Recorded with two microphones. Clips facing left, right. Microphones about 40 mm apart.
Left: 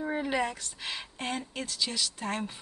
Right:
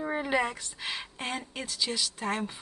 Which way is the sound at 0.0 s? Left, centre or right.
Centre.